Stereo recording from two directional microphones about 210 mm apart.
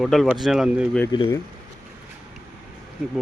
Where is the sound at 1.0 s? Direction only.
20° left (ahead or behind).